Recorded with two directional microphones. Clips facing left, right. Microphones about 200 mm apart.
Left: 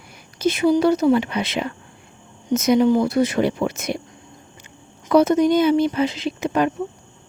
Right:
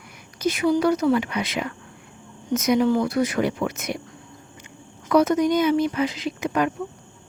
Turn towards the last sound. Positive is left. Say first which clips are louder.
# left 3 dB
turn(degrees=30)  # may be behind; listen again after turning